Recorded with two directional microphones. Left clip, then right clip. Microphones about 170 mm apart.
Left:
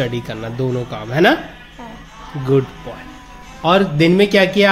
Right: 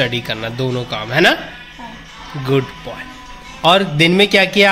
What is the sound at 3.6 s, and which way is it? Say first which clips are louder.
Speech: right 2 dB; 10° right (ahead or behind).